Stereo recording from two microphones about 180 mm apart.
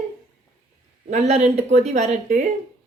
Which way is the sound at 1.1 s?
40° right (ahead or behind).